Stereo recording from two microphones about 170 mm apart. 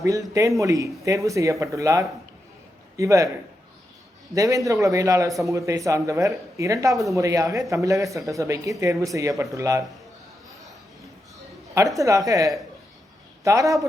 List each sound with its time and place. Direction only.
0.0 s speech: 20° right (ahead or behind)
4.4 s a man's voice: 20° right (ahead or behind)
11.9 s speech: 20° right (ahead or behind)